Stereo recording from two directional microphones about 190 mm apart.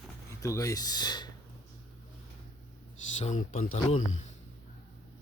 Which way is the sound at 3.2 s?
40° left (ahead or behind).